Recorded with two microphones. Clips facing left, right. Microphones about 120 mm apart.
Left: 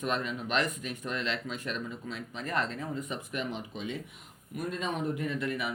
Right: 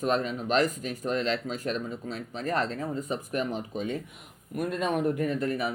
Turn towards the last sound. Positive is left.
turn(degrees=-40)  # may be behind; listen again after turning